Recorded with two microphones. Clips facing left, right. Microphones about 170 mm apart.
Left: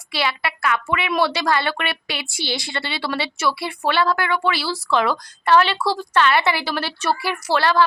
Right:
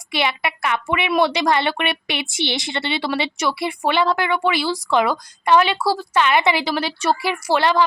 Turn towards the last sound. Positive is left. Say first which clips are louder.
# right 1 dB
turn(degrees=-20)  # may be behind; listen again after turning